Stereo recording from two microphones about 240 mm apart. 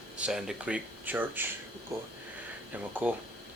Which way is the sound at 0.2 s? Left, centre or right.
Centre.